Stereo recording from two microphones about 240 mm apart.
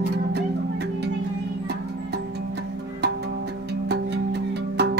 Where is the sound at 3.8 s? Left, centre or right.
Right.